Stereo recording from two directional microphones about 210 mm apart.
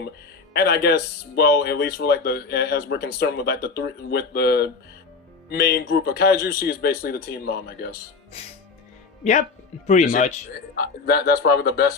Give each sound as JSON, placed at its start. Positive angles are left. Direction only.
{"t": 0.5, "sound": "speech", "side_deg": 50}
{"t": 9.8, "sound": "speech", "side_deg": 35}
{"t": 10.8, "sound": "speech", "side_deg": 50}